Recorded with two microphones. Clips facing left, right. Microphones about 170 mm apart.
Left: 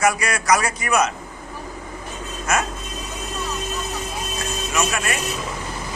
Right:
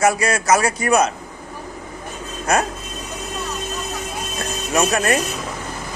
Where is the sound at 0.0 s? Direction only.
30° right (ahead or behind).